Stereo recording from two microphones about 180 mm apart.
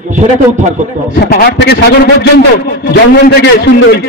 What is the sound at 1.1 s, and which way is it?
A man's voice, 60° left (ahead or behind).